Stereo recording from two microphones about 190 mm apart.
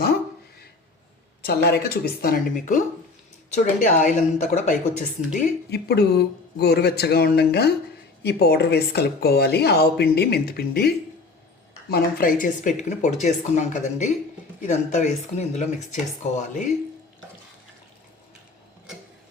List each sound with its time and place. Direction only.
1.5 s speech: 55° left (ahead or behind); by 4.8 s 40° left (ahead or behind)
5.3 s speech: 55° left (ahead or behind); by 16.7 s 40° left (ahead or behind)